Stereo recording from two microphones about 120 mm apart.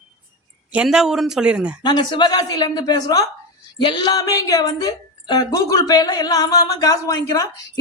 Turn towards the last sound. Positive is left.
turn(degrees=30)  # may be behind; listen again after turning